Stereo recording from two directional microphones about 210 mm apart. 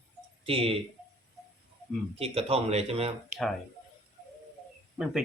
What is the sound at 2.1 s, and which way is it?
Speech, 30° right (ahead or behind).